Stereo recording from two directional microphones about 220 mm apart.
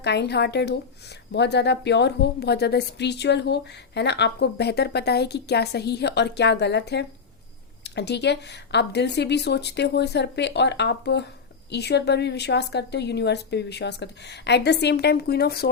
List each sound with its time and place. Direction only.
0.0 s a woman's voice: 50° left (ahead or behind)